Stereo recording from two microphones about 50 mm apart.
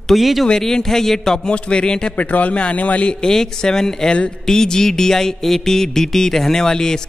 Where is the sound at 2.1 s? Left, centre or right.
Left.